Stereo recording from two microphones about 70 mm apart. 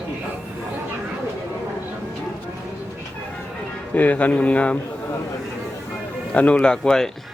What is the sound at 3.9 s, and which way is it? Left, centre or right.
Speech, left.